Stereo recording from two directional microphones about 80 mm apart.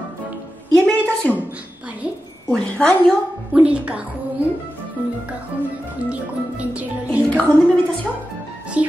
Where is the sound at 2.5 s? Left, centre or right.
Centre.